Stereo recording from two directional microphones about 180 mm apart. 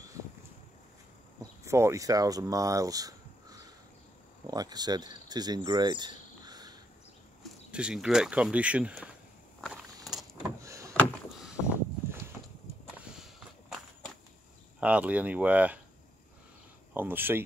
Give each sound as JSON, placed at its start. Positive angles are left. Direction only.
{"t": 1.4, "sound": "speech", "side_deg": -15}
{"t": 7.7, "sound": "speech", "side_deg": -5}
{"t": 9.6, "sound": "a sound", "side_deg": 5}
{"t": 10.1, "sound": "vehicle", "side_deg": 0}
{"t": 10.6, "sound": "door", "side_deg": -15}
{"t": 10.9, "sound": "door", "side_deg": 0}
{"t": 12.9, "sound": "walk", "side_deg": -5}
{"t": 14.8, "sound": "speech", "side_deg": -5}
{"t": 16.9, "sound": "speech", "side_deg": -10}